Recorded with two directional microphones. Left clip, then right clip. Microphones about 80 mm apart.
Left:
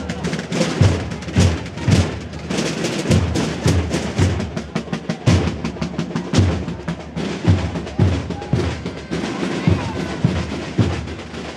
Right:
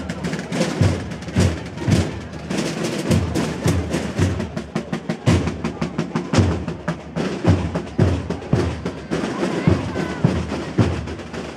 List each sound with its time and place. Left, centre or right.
0.1 s music: centre
5.6 s music: right
6.9 s music: right